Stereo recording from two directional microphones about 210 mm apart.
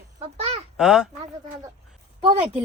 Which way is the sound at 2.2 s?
25° right (ahead or behind).